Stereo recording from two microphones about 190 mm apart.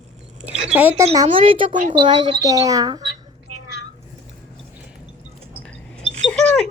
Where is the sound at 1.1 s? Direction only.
25° right (ahead or behind).